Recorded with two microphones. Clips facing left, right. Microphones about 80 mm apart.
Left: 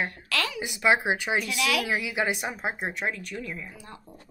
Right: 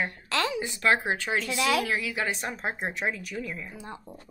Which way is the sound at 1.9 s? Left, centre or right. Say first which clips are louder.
Left 2 dB; centre.